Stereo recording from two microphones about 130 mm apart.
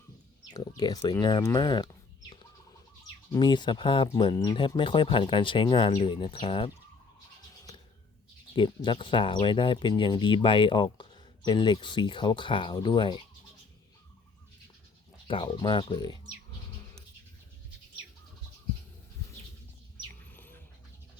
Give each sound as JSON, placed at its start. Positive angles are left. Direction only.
{"t": 0.8, "sound": "speech", "side_deg": 30}
{"t": 3.3, "sound": "speech", "side_deg": 35}
{"t": 8.5, "sound": "speech", "side_deg": 40}
{"t": 15.3, "sound": "speech", "side_deg": 40}
{"t": 20.3, "sound": "bird", "side_deg": 15}